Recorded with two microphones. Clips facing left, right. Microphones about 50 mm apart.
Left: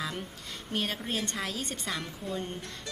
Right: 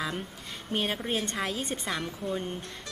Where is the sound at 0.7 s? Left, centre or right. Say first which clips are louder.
Right 3 dB; centre.